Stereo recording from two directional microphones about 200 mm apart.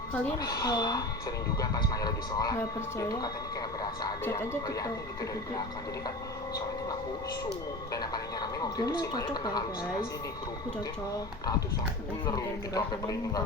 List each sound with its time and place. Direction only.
0.4 s speech: 20° left (ahead or behind)
7.9 s speech: 20° left (ahead or behind)
12.2 s speech: 15° left (ahead or behind)